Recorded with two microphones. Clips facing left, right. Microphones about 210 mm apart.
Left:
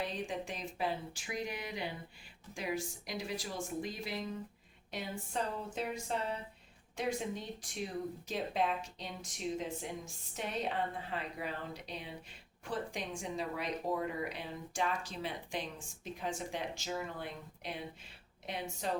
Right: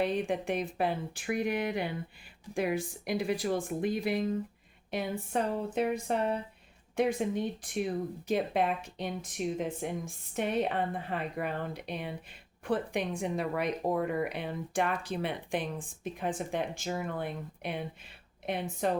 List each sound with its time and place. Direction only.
0.0 s speech: 60° right (ahead or behind)